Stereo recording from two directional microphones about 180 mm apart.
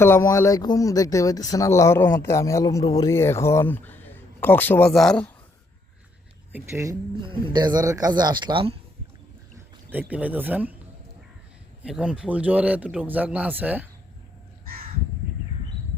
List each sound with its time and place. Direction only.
0.0 s speech: 15° left (ahead or behind)
6.5 s a man's voice: 15° right (ahead or behind)
7.2 s speech: 25° right (ahead or behind)
9.9 s a man's voice: 10° right (ahead or behind)
11.8 s a man's voice: 5° right (ahead or behind)